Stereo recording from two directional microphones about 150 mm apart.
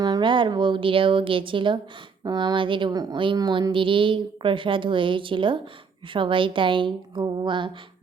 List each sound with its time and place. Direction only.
0.0 s speech: 30° right (ahead or behind)